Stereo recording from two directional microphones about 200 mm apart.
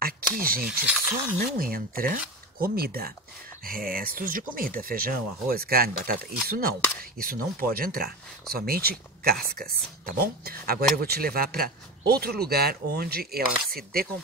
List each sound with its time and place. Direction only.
0.4 s speech: 45° right (ahead or behind)
0.7 s rub: 5° right (ahead or behind)
1.4 s speech: 45° right (ahead or behind)